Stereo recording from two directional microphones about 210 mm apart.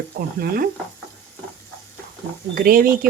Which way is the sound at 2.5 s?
45° right (ahead or behind).